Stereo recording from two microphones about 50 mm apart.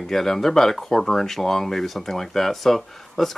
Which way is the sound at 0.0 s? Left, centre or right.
Centre.